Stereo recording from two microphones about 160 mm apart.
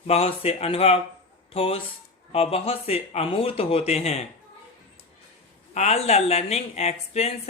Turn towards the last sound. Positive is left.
turn(degrees=40)  # may be behind; listen again after turning